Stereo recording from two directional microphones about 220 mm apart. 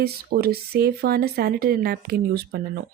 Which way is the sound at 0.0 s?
45° right (ahead or behind).